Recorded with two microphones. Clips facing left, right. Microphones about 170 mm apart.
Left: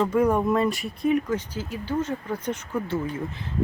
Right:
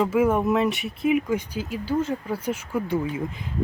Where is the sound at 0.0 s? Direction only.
5° right (ahead or behind).